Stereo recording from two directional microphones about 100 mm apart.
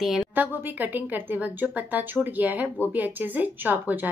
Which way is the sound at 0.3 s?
20° right (ahead or behind).